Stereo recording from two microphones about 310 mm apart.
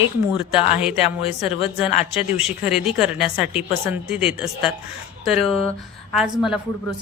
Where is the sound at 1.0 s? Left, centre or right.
Centre.